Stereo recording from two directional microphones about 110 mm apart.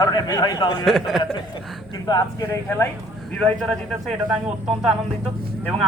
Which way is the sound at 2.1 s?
40° left (ahead or behind).